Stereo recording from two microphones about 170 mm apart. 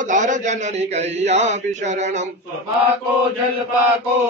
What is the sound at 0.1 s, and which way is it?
Speech, 45° right (ahead or behind).